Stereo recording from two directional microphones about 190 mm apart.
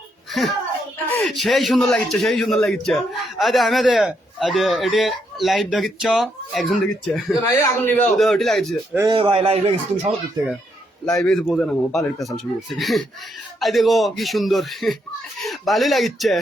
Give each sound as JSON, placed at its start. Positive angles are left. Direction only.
{"t": 1.2, "sound": "a man's voice", "side_deg": 0}
{"t": 7.5, "sound": "a man's voice", "side_deg": 15}
{"t": 9.0, "sound": "a man's voice", "side_deg": -25}
{"t": 11.2, "sound": "a man's voice", "side_deg": 0}